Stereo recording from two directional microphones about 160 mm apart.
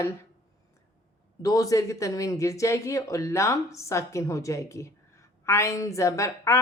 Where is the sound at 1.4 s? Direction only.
20° left (ahead or behind).